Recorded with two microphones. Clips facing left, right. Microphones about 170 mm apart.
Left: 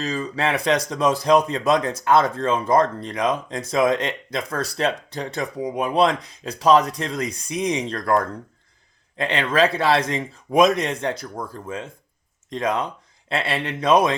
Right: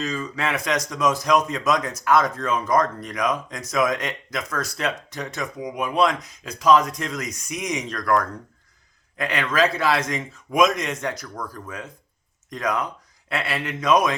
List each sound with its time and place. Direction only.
0.0 s a man's voice: 35° left (ahead or behind)